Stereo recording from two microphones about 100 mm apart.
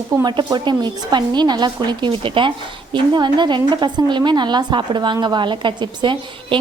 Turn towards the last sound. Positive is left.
turn(degrees=-50)  # may be behind; listen again after turning